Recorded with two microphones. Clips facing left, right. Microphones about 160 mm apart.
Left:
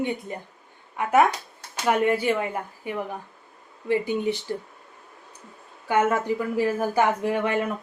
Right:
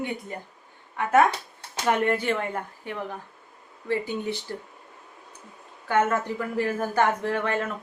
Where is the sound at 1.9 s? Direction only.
10° left (ahead or behind).